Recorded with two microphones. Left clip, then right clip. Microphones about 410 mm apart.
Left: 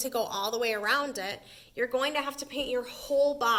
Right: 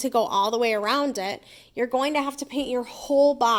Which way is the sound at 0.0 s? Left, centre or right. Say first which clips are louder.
Right 9 dB; centre.